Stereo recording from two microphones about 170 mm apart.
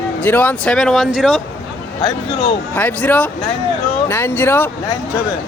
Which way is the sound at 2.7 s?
10° left (ahead or behind).